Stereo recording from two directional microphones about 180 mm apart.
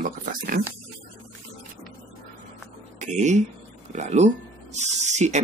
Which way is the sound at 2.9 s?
40° right (ahead or behind).